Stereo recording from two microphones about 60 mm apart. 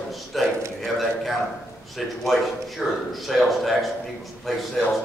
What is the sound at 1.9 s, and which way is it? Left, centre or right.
Speech, centre.